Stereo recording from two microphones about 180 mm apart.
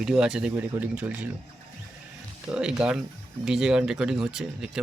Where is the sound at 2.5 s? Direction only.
5° right (ahead or behind).